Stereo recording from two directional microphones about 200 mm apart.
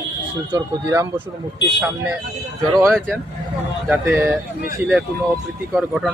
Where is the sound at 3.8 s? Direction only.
10° right (ahead or behind).